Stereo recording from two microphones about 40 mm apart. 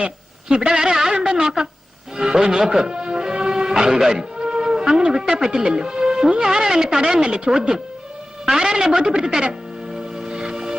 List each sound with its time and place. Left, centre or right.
0.0 s a sound: right
0.7 s music: centre
2.1 s speech: centre
9.5 s music: centre